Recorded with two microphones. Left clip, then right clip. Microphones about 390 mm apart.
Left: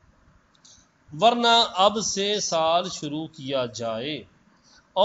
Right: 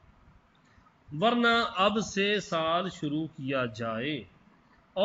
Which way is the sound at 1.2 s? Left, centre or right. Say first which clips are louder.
Left 7 dB; centre.